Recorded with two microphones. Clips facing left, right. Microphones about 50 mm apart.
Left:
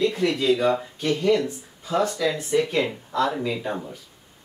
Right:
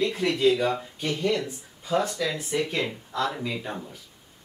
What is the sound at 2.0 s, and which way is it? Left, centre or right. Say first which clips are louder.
Speech: left 5 dB; left.